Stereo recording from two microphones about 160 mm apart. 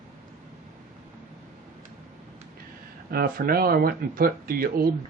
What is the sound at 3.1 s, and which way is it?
Speech, 65° right (ahead or behind).